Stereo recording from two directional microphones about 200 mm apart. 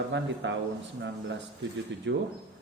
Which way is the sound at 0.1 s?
65° right (ahead or behind).